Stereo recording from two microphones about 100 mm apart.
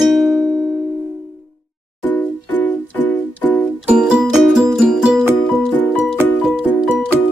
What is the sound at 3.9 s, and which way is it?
Music, 10° right (ahead or behind).